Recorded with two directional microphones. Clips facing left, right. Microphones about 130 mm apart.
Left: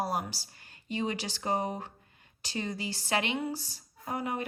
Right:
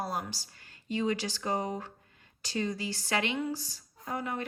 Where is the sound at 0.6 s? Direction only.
20° left (ahead or behind).